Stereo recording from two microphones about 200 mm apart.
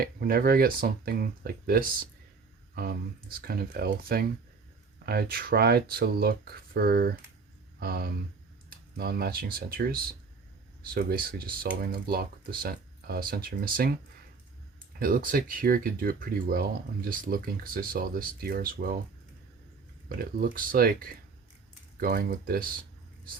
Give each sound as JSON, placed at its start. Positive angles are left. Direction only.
{"t": 0.0, "sound": "speech", "side_deg": -50}
{"t": 20.1, "sound": "speech", "side_deg": -45}